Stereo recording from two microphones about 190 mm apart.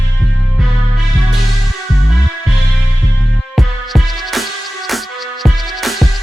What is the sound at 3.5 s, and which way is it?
Music, centre (ahead or behind).